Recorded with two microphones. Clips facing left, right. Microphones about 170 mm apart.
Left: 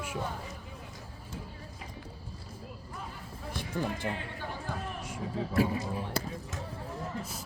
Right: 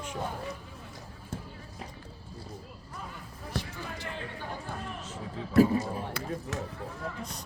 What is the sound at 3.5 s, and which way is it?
Basketball bounce, 55° left (ahead or behind).